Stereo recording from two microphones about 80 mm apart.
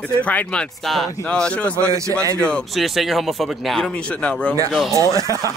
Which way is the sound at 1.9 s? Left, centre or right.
Right.